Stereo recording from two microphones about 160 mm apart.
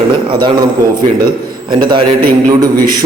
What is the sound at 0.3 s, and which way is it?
Speech, 30° right (ahead or behind).